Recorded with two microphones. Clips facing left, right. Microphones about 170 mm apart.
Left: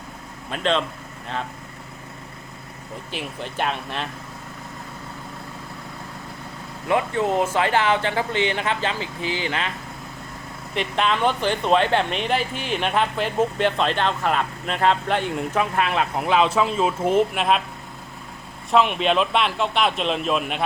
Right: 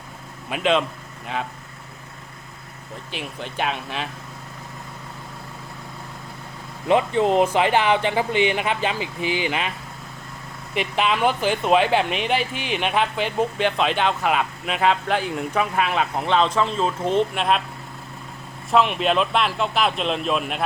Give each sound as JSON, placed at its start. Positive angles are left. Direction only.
{"t": 0.5, "sound": "speech", "side_deg": -10}
{"t": 3.1, "sound": "speech", "side_deg": 0}
{"t": 6.8, "sound": "speech", "side_deg": -20}
{"t": 10.8, "sound": "speech", "side_deg": -5}
{"t": 18.7, "sound": "speech", "side_deg": 0}